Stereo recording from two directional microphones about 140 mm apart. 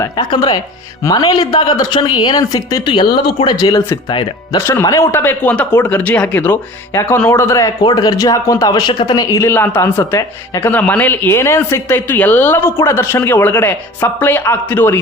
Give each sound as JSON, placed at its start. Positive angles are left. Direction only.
{"t": 0.0, "sound": "speech", "side_deg": 30}
{"t": 4.1, "sound": "speech", "side_deg": 35}
{"t": 4.6, "sound": "speech", "side_deg": 15}